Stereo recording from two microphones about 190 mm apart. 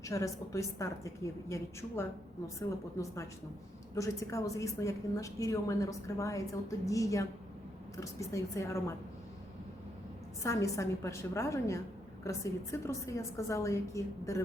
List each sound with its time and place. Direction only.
0.0 s a woman's voice: 15° left (ahead or behind)
10.4 s a woman's voice: 15° left (ahead or behind)